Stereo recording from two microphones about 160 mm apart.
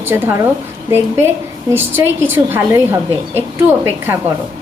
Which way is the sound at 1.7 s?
15° right (ahead or behind).